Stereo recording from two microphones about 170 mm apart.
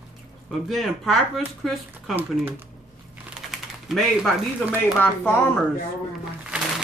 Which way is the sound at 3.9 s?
Centre (ahead or behind).